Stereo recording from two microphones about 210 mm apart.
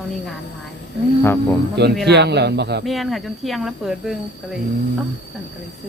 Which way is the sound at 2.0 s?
55° right (ahead or behind).